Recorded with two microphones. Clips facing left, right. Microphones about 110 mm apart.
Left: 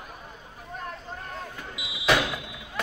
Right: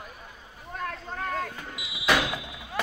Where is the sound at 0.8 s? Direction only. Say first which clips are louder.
Right 5 dB; 90° right.